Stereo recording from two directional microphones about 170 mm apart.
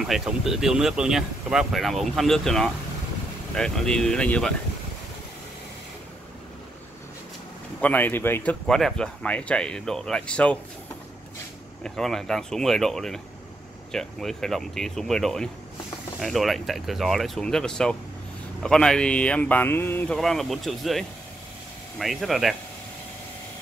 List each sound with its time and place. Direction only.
0.0 s speech: 5° right (ahead or behind)
7.8 s speech: 10° left (ahead or behind)
11.8 s speech: centre (ahead or behind)